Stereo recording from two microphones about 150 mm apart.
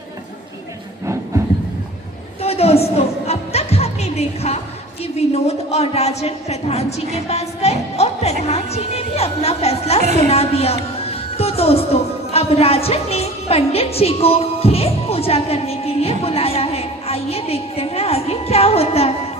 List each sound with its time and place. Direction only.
2.4 s music: 40° left (ahead or behind)
5.3 s speech: 45° left (ahead or behind)
10.0 s a woman's voice: 45° right (ahead or behind)
10.3 s speech: 45° left (ahead or behind)
11.1 s music: 40° left (ahead or behind)